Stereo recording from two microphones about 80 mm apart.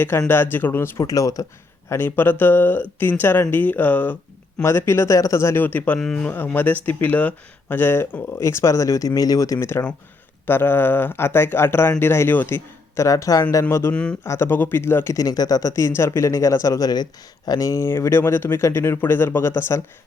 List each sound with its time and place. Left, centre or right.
0.1 s speech: left
1.0 s speech: left
1.9 s speech: left
4.6 s speech: left
5.6 s speech: left
6.0 s speech: centre
6.3 s speech: left
13.0 s speech: left
13.9 s speech: centre
14.3 s speech: left
15.1 s speech: left
16.9 s speech: left